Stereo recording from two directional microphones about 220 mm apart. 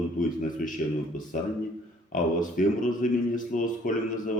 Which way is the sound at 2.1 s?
35° left (ahead or behind).